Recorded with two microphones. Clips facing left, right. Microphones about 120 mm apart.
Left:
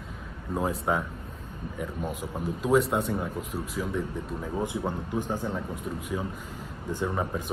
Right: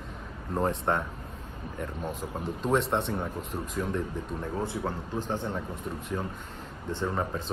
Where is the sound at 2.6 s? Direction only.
5° left (ahead or behind).